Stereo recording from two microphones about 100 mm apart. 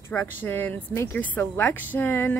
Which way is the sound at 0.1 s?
20° left (ahead or behind).